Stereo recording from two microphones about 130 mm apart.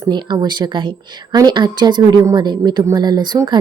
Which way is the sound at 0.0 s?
35° right (ahead or behind).